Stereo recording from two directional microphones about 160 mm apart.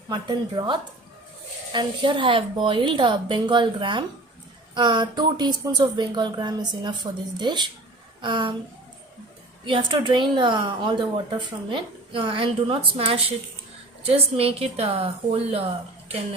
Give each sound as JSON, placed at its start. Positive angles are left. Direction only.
{"t": 0.1, "sound": "a woman's voice", "side_deg": -25}
{"t": 9.6, "sound": "a woman's voice", "side_deg": -30}